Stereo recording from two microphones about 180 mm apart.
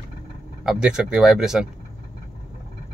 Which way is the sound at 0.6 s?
5° right (ahead or behind).